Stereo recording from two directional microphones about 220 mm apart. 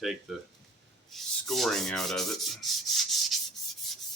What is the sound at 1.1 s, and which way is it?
Rub, centre (ahead or behind).